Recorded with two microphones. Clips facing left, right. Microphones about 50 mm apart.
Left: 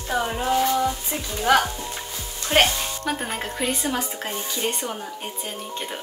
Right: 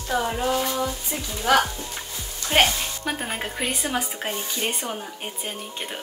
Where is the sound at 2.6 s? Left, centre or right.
Centre.